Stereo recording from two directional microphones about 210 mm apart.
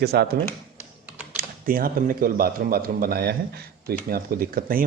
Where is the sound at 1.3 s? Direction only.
45° right (ahead or behind).